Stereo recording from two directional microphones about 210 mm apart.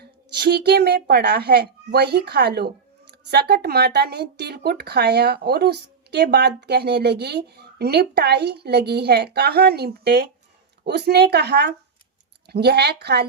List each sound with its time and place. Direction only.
0.0 s speech: 50° right (ahead or behind)